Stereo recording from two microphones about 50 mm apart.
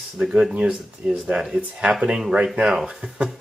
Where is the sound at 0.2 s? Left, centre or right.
Centre.